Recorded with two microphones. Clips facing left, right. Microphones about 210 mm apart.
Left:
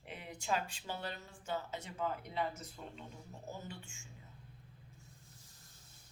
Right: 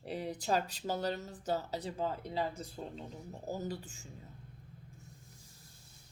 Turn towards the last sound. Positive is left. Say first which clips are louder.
# right 5 dB
turn(degrees=-35)  # may be behind; listen again after turning